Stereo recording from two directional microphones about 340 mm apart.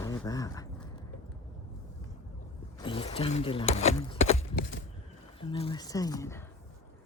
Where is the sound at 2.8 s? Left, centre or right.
Centre.